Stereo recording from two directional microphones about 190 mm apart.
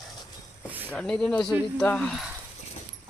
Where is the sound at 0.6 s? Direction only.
10° right (ahead or behind).